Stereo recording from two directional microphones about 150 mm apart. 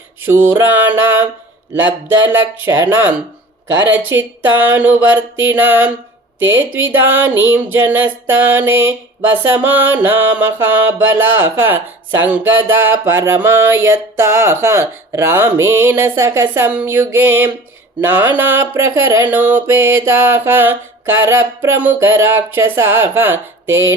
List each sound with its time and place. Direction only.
0.3 s music: 15° right (ahead or behind)
4.6 s music: 10° right (ahead or behind)
6.9 s music: 15° right (ahead or behind)